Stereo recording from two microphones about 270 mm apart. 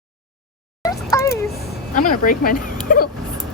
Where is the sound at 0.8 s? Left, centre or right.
Centre.